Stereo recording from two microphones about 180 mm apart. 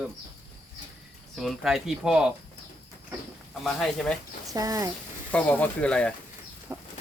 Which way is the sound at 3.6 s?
Centre (ahead or behind).